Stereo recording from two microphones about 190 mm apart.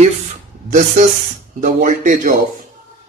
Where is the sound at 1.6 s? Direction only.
45° right (ahead or behind).